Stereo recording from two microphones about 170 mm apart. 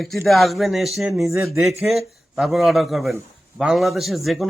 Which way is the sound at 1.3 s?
15° right (ahead or behind).